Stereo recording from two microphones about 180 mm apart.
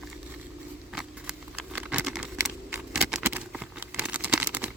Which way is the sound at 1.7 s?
5° right (ahead or behind).